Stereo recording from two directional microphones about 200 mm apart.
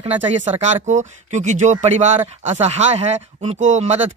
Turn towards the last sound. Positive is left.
turn(degrees=-35)  # may be behind; listen again after turning